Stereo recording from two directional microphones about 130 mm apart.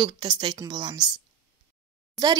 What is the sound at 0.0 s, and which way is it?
Speech, 35° right (ahead or behind).